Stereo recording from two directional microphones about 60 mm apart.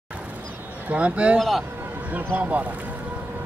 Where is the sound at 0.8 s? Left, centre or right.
Right.